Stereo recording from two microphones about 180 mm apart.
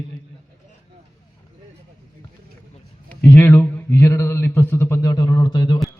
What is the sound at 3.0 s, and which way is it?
Speech, 10° left (ahead or behind).